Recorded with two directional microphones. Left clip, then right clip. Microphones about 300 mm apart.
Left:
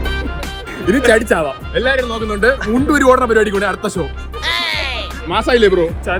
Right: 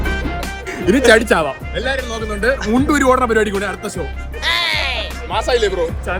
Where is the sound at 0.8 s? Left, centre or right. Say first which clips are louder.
Right 1 dB; centre.